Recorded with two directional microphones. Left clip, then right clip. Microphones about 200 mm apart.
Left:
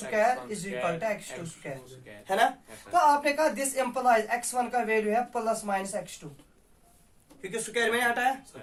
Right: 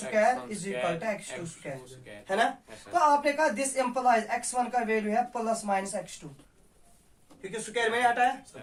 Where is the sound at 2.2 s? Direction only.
30° left (ahead or behind).